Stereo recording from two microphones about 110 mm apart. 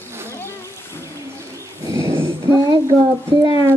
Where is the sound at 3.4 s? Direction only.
35° right (ahead or behind).